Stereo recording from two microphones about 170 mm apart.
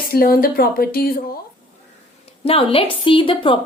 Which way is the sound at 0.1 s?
60° left (ahead or behind).